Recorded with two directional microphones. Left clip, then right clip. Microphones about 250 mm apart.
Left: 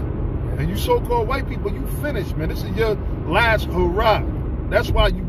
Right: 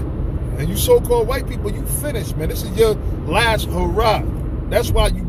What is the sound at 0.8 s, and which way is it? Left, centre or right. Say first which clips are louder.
Speech: right 5 dB; centre.